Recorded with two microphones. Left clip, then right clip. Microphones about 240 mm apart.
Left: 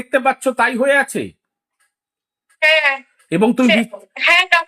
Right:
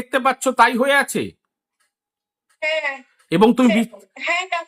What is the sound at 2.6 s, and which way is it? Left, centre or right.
Speech, centre.